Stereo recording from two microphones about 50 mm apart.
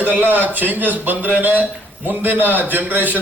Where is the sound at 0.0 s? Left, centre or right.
Right.